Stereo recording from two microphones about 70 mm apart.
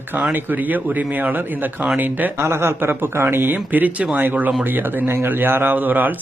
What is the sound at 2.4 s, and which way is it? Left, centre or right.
A man's voice, right.